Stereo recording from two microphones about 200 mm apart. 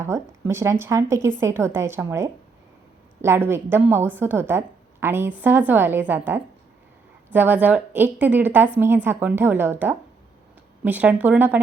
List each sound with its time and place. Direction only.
0.0 s a woman's voice: 15° right (ahead or behind)